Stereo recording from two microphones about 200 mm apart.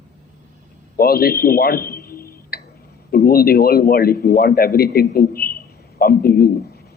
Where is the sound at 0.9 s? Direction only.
50° left (ahead or behind).